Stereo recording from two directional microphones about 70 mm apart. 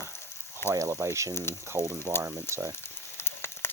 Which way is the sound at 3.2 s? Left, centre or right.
Left.